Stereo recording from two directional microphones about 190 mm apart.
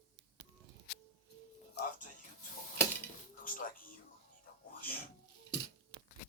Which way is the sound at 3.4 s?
45° left (ahead or behind).